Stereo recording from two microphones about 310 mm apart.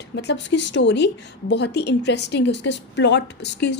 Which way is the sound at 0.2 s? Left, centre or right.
Left.